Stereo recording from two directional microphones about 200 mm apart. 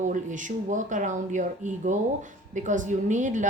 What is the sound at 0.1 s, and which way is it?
A woman's voice, 40° right (ahead or behind).